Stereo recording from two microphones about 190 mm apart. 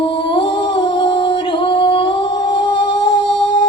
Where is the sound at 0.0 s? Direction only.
25° left (ahead or behind).